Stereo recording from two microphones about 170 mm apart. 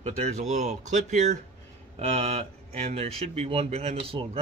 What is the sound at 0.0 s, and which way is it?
Speech, 40° right (ahead or behind).